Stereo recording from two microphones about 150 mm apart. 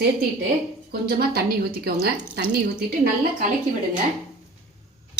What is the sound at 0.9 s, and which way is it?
A woman's voice, 90° right.